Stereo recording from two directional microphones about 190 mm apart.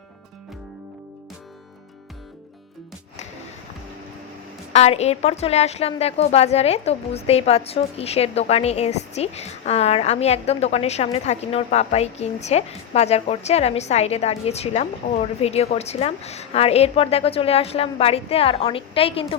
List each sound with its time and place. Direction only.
4.7 s a woman's voice: 35° left (ahead or behind)